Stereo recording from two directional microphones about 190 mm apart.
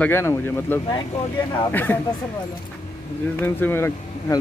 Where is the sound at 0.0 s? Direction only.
10° left (ahead or behind).